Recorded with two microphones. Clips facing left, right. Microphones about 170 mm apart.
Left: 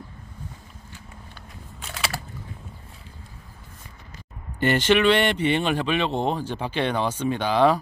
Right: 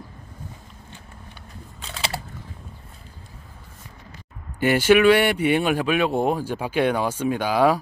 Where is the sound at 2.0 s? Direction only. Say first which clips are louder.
Right 1 dB; 25° right (ahead or behind).